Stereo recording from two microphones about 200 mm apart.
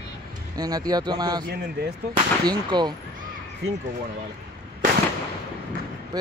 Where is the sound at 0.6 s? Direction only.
20° right (ahead or behind).